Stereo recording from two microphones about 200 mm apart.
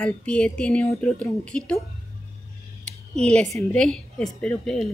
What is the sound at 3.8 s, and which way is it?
Speech, 5° left (ahead or behind).